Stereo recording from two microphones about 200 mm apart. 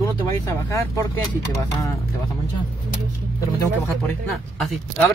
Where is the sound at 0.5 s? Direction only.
15° left (ahead or behind).